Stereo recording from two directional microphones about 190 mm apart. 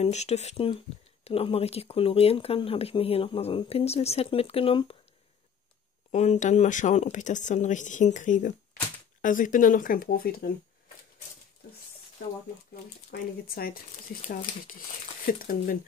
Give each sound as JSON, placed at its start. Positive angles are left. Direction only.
{"t": 0.0, "sound": "speech", "side_deg": 35}
{"t": 6.1, "sound": "speech", "side_deg": 35}
{"t": 13.1, "sound": "speech", "side_deg": 50}